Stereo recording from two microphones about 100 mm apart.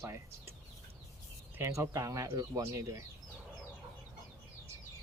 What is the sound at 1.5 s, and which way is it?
Speech, 30° right (ahead or behind).